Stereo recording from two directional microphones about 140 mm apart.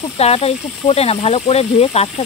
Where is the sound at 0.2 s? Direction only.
45° left (ahead or behind).